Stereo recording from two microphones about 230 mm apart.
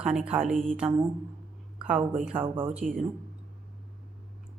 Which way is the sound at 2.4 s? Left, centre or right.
Right.